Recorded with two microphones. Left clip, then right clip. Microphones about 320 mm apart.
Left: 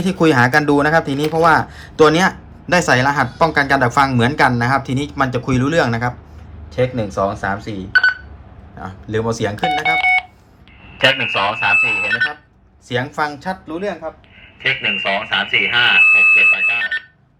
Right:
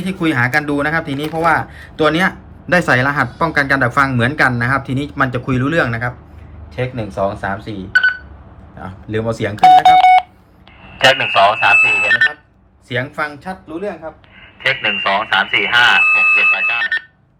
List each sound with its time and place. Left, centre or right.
0.0 s speech: centre
8.8 s speech: centre
10.0 s telephone dialing: centre
11.0 s speech: centre
12.9 s speech: centre
14.6 s speech: centre